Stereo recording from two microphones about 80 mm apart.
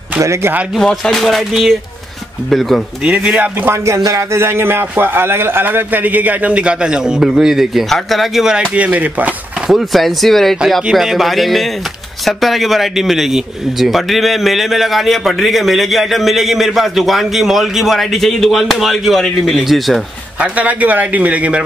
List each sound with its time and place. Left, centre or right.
0.2 s speech: right
0.7 s a man's voice: centre
3.0 s speech: centre
3.6 s a man's voice: right; by 8.6 s centre
8.7 s a man's voice: centre
9.7 s a man's voice: centre
20.3 s speech: centre